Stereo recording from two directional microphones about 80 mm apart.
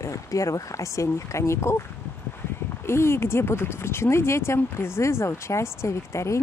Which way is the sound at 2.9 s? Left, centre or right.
Left.